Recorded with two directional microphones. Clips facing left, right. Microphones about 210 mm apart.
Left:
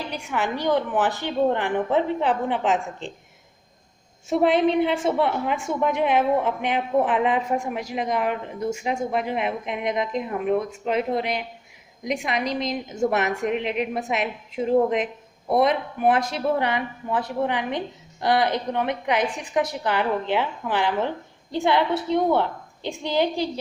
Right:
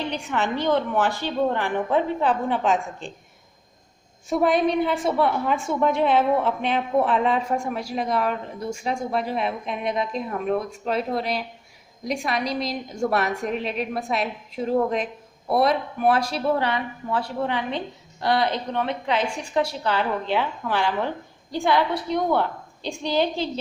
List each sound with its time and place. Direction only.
0.1 s a woman's voice: 10° left (ahead or behind)
4.3 s a woman's voice: 25° left (ahead or behind)